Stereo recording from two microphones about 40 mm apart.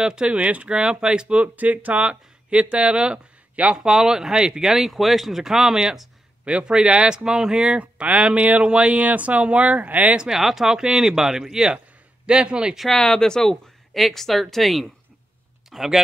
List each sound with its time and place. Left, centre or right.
0.0 s speech: right
1.5 s speech: right
3.8 s speech: centre
4.7 s speech: centre
6.4 s speech: right
8.6 s speech: right
8.9 s speech: right
10.1 s speech: centre
12.3 s speech: right
12.9 s speech: centre